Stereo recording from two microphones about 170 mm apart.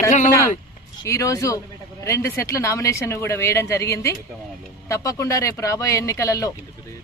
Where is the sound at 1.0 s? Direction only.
20° left (ahead or behind).